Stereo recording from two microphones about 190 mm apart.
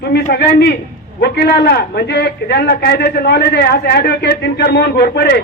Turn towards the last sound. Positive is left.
turn(degrees=55)  # may be behind; listen again after turning